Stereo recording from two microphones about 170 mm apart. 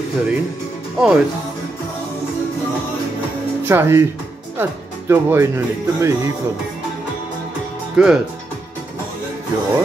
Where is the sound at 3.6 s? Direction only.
15° right (ahead or behind).